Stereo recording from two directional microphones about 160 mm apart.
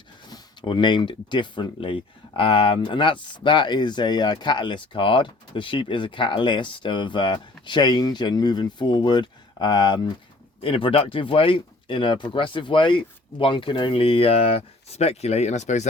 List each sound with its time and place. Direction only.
0.3 s speech: 30° left (ahead or behind); by 15.9 s 45° left (ahead or behind)